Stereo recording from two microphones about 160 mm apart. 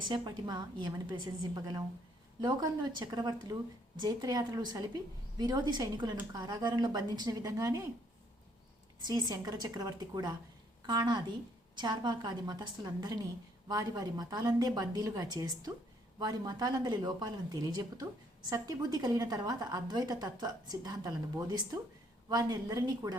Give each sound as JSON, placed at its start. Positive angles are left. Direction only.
{"t": 0.1, "sound": "a woman's voice", "side_deg": -25}
{"t": 9.0, "sound": "a woman's voice", "side_deg": -25}